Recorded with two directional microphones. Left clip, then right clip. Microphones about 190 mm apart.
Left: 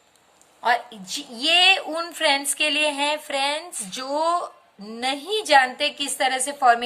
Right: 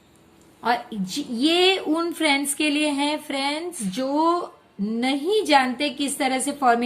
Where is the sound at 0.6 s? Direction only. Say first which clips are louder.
Left 2 dB; 25° left (ahead or behind).